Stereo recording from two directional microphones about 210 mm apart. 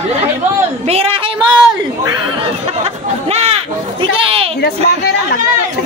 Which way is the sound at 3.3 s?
30° right (ahead or behind).